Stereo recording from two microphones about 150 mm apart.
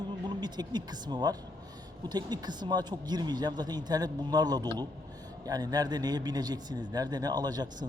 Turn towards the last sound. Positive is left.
turn(degrees=-25)  # may be behind; listen again after turning